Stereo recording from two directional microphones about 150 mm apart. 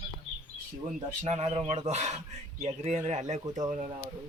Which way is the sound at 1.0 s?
50° right (ahead or behind).